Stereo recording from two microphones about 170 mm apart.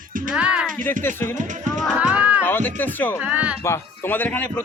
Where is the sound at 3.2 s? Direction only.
10° right (ahead or behind).